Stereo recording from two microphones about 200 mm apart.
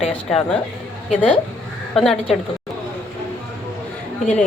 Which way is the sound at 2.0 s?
Centre (ahead or behind).